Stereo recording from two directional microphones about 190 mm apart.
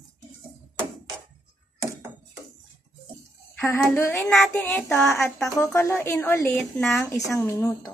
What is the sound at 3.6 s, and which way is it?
Speech, 15° left (ahead or behind).